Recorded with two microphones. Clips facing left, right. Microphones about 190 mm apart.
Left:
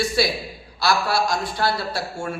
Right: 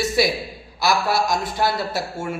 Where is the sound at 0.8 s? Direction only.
20° right (ahead or behind).